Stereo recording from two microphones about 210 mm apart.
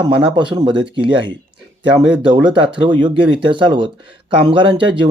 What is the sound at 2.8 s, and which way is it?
Speech, 20° right (ahead or behind).